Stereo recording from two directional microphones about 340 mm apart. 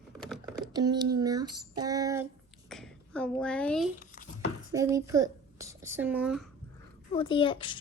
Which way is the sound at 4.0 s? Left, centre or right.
Left.